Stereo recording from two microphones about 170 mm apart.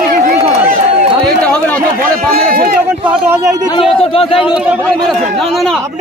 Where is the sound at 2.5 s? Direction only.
60° right (ahead or behind).